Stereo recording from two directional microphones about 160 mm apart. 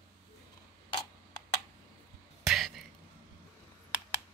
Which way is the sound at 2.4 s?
Centre (ahead or behind).